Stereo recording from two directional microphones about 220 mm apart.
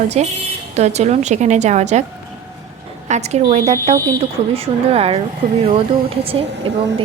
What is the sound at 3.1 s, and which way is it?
A woman's voice, 30° right (ahead or behind).